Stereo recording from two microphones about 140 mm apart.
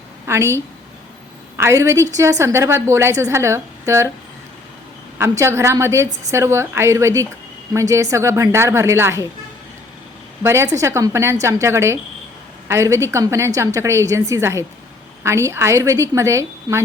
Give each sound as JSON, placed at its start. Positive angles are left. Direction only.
{"t": 0.3, "sound": "a woman's voice", "side_deg": -20}
{"t": 5.1, "sound": "a woman's voice", "side_deg": -20}
{"t": 10.4, "sound": "a woman's voice", "side_deg": -20}